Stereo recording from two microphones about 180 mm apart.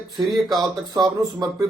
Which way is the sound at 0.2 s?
25° right (ahead or behind).